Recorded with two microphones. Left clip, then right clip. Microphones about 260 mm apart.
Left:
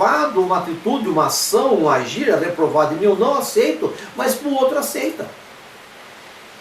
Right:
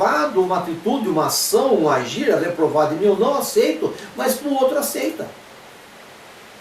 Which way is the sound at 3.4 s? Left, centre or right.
Centre.